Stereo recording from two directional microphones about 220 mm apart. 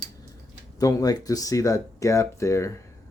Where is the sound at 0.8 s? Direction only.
15° left (ahead or behind).